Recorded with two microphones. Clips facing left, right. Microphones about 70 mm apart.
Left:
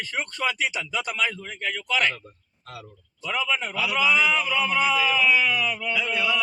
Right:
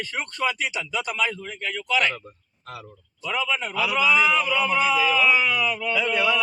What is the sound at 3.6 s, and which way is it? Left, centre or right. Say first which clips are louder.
Speech: right 2 dB; centre.